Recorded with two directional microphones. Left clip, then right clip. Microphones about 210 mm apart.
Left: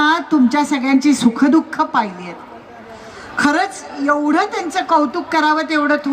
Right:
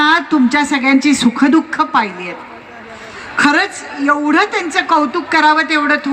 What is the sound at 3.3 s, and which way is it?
A woman's voice, 55° left (ahead or behind).